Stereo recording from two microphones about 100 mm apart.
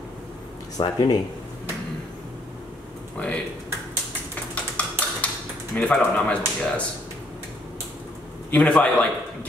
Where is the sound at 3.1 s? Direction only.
15° left (ahead or behind).